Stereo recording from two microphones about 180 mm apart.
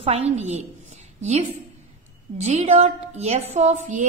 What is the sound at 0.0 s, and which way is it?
Speech, 35° right (ahead or behind).